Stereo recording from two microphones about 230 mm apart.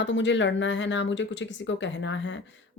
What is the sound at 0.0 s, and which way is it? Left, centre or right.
Speech, left.